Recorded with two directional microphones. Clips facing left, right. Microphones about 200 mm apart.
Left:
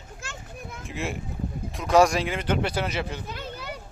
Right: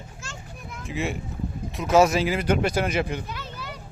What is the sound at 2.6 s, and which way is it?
Speech, 45° right (ahead or behind).